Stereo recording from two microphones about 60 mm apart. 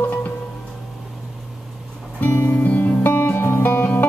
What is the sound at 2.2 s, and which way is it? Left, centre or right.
Music, left.